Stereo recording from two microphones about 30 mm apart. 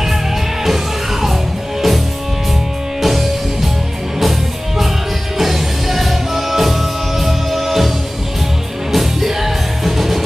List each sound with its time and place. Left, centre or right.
1.2 s music: centre
3.0 s music: centre
5.4 s music: centre
8.9 s music: centre